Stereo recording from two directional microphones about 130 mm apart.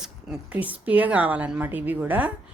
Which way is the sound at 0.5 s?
10° right (ahead or behind).